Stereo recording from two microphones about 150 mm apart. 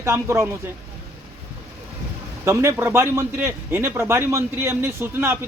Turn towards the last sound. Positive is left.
turn(degrees=-15)  # may be behind; listen again after turning